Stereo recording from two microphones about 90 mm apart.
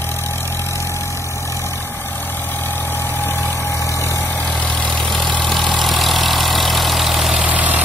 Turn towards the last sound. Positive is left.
turn(degrees=-15)  # may be behind; listen again after turning